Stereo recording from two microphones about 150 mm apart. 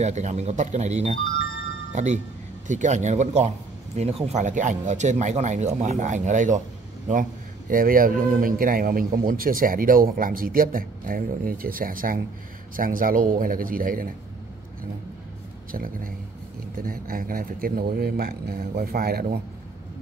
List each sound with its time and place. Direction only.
0.0 s speech: 50° right (ahead or behind)
7.7 s a man's voice: 70° right (ahead or behind)
15.7 s a man's voice: 70° right (ahead or behind)